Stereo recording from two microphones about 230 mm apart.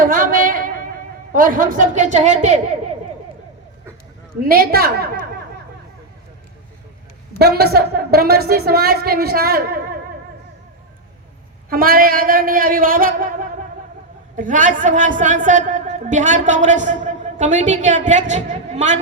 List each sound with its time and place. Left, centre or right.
0.0 s a sound: right
1.3 s a woman's voice: right
4.4 s a woman's voice: right
7.3 s a woman's voice: right
11.7 s a woman's voice: right